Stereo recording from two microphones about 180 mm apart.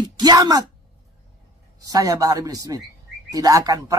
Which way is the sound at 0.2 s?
20° right (ahead or behind).